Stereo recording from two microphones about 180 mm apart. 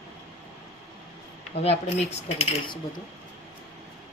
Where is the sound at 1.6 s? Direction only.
35° left (ahead or behind).